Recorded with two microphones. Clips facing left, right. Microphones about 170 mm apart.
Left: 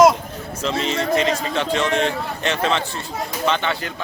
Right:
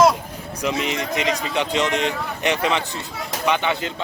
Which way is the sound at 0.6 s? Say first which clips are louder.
Left 2 dB; 15° right (ahead or behind).